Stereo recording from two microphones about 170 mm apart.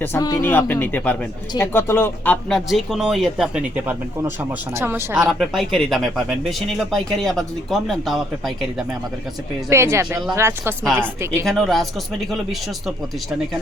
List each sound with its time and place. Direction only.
0.0 s speech: 15° left (ahead or behind); by 8.5 s centre (ahead or behind)
9.6 s speech: 15° right (ahead or behind)
11.4 s speech: centre (ahead or behind)